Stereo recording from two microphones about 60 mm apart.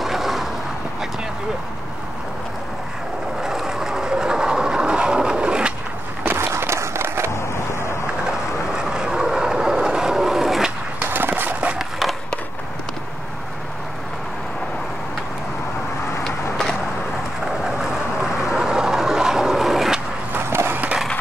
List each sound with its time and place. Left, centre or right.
0.0 s vehicle: centre
3.4 s train: centre
6.5 s run: right
8.3 s train: centre
11.1 s skateboard: right
16.3 s vehicle: centre
17.5 s vehicle: centre
20.3 s skateboard: right